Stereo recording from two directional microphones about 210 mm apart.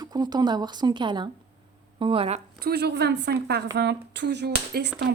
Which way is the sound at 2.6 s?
50° right (ahead or behind).